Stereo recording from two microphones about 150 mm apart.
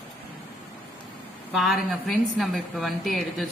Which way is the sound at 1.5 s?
Centre (ahead or behind).